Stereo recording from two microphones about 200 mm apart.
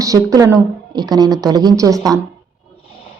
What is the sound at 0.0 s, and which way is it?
A woman's voice, 15° right (ahead or behind).